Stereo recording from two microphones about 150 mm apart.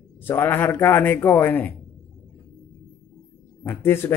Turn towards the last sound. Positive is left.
turn(degrees=15)  # may be behind; listen again after turning